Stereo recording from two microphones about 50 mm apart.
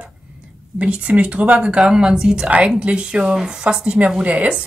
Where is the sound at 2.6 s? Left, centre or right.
Right.